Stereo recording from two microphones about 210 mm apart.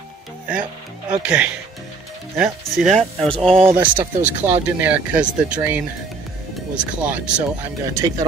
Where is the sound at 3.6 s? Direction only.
10° right (ahead or behind).